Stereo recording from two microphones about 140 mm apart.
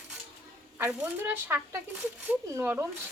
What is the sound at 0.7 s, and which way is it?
Speech, 10° right (ahead or behind).